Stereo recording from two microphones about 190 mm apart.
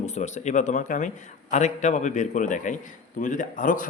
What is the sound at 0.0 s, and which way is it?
A man's voice, 35° left (ahead or behind).